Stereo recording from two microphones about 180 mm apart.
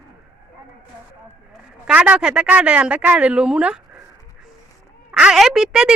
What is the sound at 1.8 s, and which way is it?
Speech, 5° right (ahead or behind).